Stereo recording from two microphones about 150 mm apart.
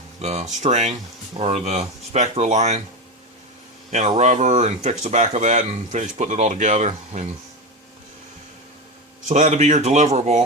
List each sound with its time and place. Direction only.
0.2 s speech: 45° right (ahead or behind)
4.2 s speech: 50° right (ahead or behind)
9.2 s speech: 55° right (ahead or behind)